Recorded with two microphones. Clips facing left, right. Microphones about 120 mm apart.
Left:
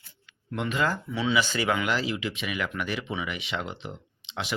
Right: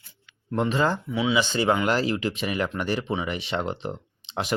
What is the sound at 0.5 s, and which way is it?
Speech, 35° right (ahead or behind).